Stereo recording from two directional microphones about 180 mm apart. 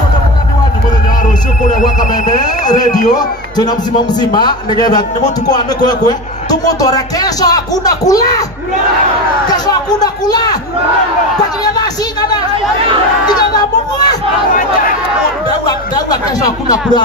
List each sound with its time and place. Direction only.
1.7 s a sound: 45° left (ahead or behind)
2.6 s a man's voice: 20° left (ahead or behind)
9.5 s a man's voice: 20° left (ahead or behind)
11.6 s a sound: 20° left (ahead or behind)
13.3 s speech: 20° left (ahead or behind)
15.6 s a man's voice: 20° left (ahead or behind)